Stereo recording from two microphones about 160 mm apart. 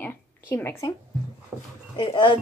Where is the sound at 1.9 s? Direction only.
30° left (ahead or behind).